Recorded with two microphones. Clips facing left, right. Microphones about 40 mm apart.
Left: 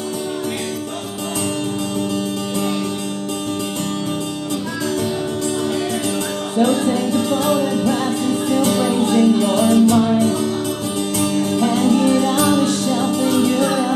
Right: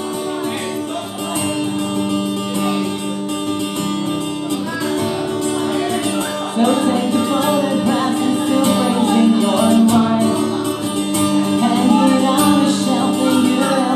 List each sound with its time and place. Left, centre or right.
6.6 s music: right
11.1 s music: right
11.4 s music: right